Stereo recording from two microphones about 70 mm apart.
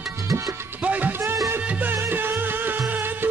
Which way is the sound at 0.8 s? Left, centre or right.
Right.